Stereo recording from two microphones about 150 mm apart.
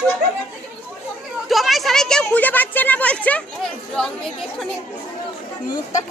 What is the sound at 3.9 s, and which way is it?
Speech, 5° left (ahead or behind).